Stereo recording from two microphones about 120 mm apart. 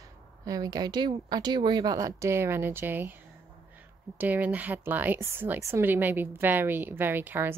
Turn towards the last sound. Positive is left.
turn(degrees=-15)  # may be behind; listen again after turning